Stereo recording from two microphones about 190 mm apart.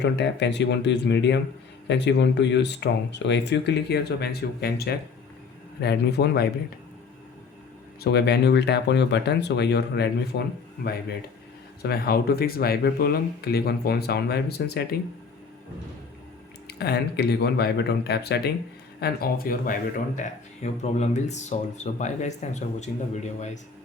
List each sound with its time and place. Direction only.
0.0 s speech: 65° left (ahead or behind)
8.0 s speech: 60° left (ahead or behind)
11.8 s speech: 55° left (ahead or behind)
16.6 s speech: 60° left (ahead or behind); by 23.5 s 40° left (ahead or behind)